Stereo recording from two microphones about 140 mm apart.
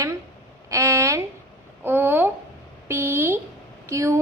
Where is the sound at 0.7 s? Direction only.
20° right (ahead or behind).